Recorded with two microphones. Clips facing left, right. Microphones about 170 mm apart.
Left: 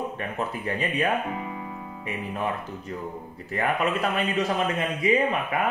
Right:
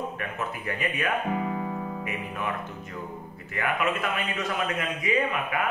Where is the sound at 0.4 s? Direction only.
30° left (ahead or behind).